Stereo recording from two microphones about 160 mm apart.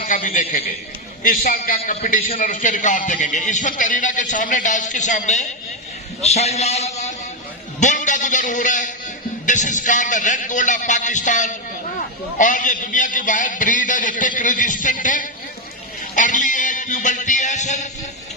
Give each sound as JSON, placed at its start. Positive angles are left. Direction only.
{"t": 0.0, "sound": "a man's voice", "side_deg": 55}
{"t": 7.8, "sound": "a sound", "side_deg": 50}
{"t": 9.5, "sound": "a man's voice", "side_deg": 50}